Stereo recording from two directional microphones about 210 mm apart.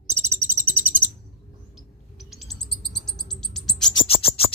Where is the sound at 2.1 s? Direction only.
Centre (ahead or behind).